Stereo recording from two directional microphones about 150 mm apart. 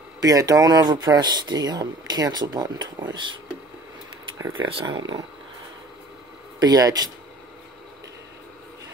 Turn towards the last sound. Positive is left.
turn(degrees=-25)  # may be behind; listen again after turning